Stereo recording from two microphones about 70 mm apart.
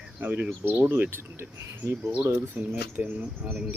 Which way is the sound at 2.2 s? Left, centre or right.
Right.